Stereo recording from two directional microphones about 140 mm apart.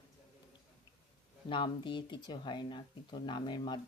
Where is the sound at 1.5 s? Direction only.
35° left (ahead or behind).